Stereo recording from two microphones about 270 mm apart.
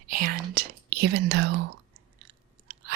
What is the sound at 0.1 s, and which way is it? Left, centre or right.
Whispering, right.